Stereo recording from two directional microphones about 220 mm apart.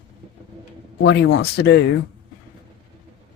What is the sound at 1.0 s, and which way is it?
Speech, 50° left (ahead or behind).